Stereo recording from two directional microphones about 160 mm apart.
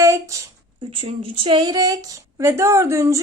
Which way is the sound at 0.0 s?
20° right (ahead or behind).